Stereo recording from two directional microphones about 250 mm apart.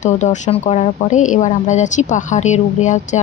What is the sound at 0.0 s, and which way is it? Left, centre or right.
Speech, left.